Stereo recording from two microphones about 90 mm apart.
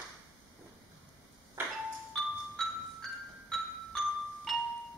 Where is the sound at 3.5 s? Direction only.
Centre (ahead or behind).